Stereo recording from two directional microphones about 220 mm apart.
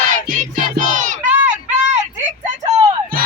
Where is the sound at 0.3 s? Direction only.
35° right (ahead or behind).